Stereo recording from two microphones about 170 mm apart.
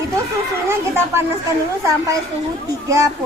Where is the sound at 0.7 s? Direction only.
15° right (ahead or behind).